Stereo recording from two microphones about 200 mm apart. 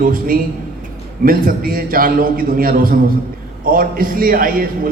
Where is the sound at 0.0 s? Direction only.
45° right (ahead or behind).